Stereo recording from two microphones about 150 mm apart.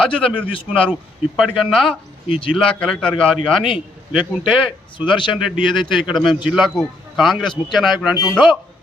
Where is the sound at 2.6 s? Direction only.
5° left (ahead or behind).